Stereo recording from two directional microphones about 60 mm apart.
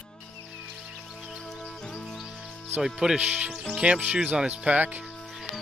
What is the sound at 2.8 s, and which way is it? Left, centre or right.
Speech, centre.